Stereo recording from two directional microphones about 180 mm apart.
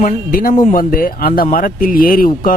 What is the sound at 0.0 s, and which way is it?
Speech, 50° left (ahead or behind).